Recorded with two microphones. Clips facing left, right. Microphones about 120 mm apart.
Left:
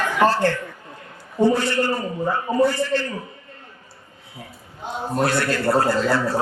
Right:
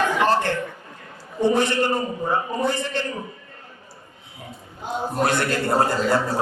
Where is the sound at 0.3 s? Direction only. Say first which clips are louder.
Left 1 dB; 20° right (ahead or behind).